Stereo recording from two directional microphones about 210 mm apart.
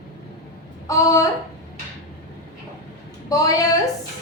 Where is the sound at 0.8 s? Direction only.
15° left (ahead or behind).